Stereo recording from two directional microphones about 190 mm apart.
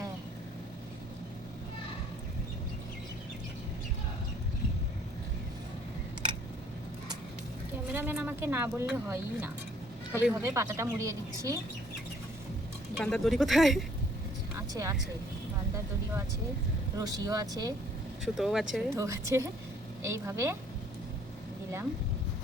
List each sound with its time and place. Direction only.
7.9 s speech: 10° right (ahead or behind)
13.0 s speech: 5° left (ahead or behind)
14.7 s speech: 15° right (ahead or behind)
17.0 s speech: 20° right (ahead or behind)
18.3 s speech: centre (ahead or behind)
18.9 s speech: 15° right (ahead or behind)